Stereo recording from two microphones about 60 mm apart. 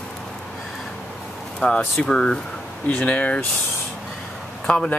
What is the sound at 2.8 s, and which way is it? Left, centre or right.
Speech, left.